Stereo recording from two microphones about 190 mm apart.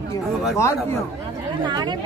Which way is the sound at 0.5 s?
15° left (ahead or behind).